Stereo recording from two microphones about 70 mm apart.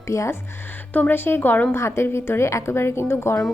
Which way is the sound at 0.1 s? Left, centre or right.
Left.